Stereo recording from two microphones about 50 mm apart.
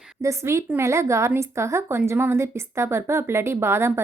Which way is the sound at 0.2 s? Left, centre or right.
Right.